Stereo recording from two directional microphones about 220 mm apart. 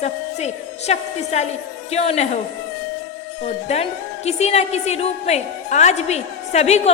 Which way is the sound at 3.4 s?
30° left (ahead or behind).